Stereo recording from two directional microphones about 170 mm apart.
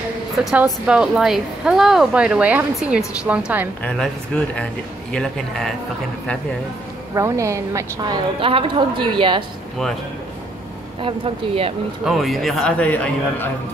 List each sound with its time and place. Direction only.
0.4 s a woman's voice: centre (ahead or behind)
3.8 s speech: 5° left (ahead or behind)
7.2 s a woman's voice: 20° right (ahead or behind)
11.0 s speech: 30° right (ahead or behind)
12.0 s speech: centre (ahead or behind)